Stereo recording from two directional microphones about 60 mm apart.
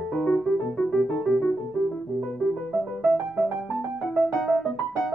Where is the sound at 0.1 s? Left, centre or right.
Left.